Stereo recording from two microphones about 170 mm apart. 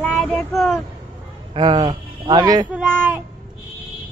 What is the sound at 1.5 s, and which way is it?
Speech, 25° right (ahead or behind).